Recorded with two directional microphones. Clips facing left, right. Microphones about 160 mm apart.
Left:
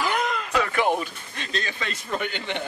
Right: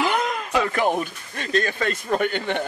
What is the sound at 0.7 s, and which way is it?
Speech, 45° right (ahead or behind).